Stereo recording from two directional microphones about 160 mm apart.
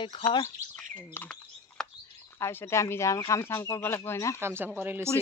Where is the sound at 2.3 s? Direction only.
15° left (ahead or behind).